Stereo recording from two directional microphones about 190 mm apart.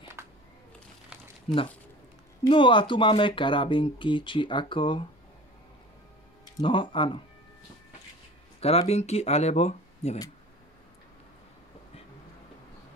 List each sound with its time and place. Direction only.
0.2 s a sound: 15° right (ahead or behind)
1.5 s speech: 30° left (ahead or behind)
6.6 s speech: 25° left (ahead or behind)
8.5 s speech: 30° left (ahead or behind)